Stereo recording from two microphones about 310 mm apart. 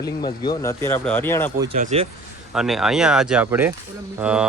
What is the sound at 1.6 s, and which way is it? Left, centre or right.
Speech, right.